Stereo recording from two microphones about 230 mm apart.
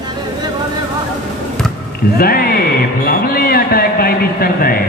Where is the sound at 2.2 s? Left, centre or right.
Left.